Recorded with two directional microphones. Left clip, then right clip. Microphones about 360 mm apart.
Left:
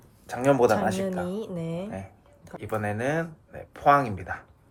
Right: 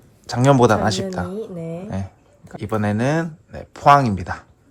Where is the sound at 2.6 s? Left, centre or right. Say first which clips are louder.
Right 7 dB; centre.